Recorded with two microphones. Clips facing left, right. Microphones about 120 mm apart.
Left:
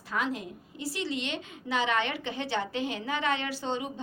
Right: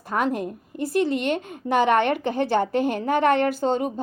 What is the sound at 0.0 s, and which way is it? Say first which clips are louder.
A woman's voice: right 8 dB; 50° right (ahead or behind).